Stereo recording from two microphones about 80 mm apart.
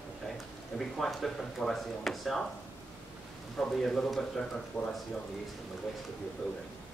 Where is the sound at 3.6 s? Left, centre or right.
Centre.